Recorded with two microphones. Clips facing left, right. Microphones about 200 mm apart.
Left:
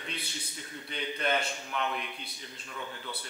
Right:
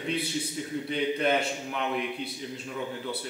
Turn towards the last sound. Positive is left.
turn(degrees=-10)  # may be behind; listen again after turning